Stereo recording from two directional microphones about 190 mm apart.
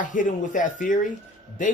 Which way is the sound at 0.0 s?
45° left (ahead or behind).